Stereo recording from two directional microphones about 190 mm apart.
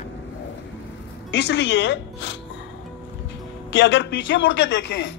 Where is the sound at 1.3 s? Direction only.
65° left (ahead or behind).